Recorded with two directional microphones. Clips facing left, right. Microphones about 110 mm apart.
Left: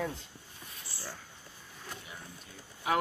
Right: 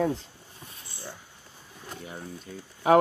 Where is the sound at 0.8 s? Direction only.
20° right (ahead or behind).